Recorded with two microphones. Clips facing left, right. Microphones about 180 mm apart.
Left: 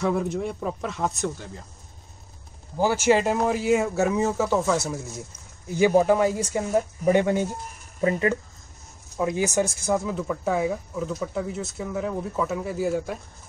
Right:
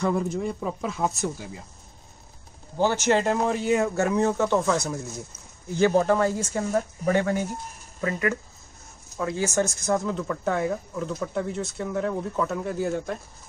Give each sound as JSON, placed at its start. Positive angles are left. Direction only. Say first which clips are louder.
{"t": 0.0, "sound": "speech", "louder": "even", "side_deg": 0}
{"t": 2.8, "sound": "speech", "louder": "left 2 dB", "side_deg": 10}
{"t": 9.8, "sound": "speech", "louder": "even", "side_deg": 5}